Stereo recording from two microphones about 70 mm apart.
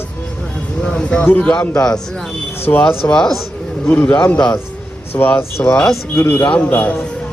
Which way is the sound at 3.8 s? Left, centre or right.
Left.